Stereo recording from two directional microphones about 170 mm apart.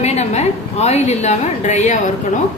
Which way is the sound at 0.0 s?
40° left (ahead or behind).